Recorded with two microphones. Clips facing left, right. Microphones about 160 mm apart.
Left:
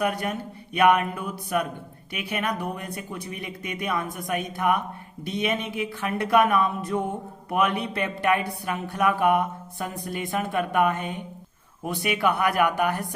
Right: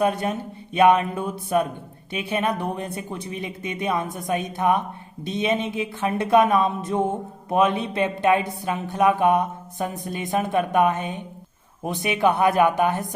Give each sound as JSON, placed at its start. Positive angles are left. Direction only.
{"t": 0.0, "sound": "a woman's voice", "side_deg": -25}